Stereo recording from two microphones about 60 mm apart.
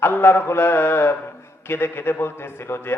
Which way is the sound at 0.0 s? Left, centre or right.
Left.